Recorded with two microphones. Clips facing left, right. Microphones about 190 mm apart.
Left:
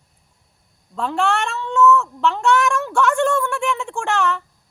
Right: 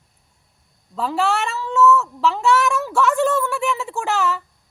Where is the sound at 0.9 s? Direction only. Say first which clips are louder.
Even; 5° right (ahead or behind).